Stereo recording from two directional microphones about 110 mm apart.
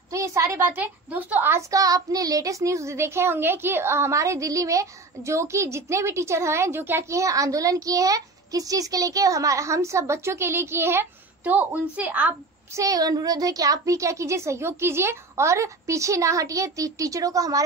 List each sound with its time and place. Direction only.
0.1 s a woman's voice: 30° right (ahead or behind)
1.7 s a child's voice: 30° right (ahead or behind); by 12.4 s 15° right (ahead or behind)
12.7 s a child's voice: 30° right (ahead or behind)